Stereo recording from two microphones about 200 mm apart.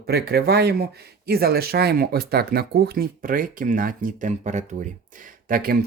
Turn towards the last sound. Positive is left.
turn(degrees=-45)  # may be behind; listen again after turning